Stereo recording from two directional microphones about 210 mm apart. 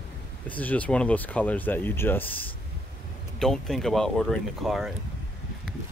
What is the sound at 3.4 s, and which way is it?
Speech, centre (ahead or behind).